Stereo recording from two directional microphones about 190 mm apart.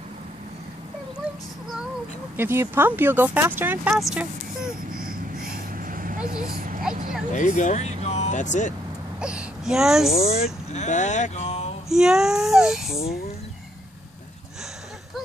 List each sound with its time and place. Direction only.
2.3 s a child's voice: 10° right (ahead or behind)
5.5 s vehicle: 50° right (ahead or behind)
7.3 s speech: 40° left (ahead or behind)
9.2 s speech: 5° right (ahead or behind)
10.1 s speech: 35° left (ahead or behind)
11.9 s a child's voice: 5° right (ahead or behind)